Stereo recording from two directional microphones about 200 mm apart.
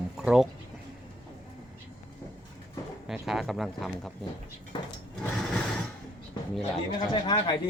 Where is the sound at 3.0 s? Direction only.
Centre (ahead or behind).